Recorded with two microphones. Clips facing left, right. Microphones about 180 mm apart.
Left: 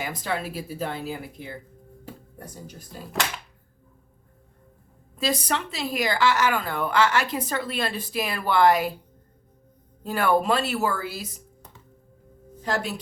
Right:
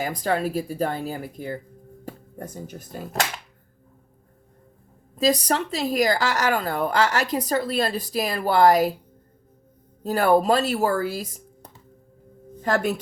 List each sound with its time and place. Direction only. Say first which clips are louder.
0.0 s speech: right 5 dB; 40° right (ahead or behind)
5.1 s speech: right 5 dB; 40° right (ahead or behind)
10.0 s speech: right 4 dB; 40° right (ahead or behind)